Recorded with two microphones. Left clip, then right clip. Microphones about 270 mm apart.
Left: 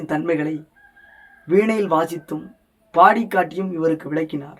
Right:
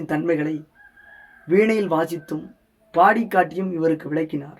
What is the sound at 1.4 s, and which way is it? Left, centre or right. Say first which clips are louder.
Speech: even; centre.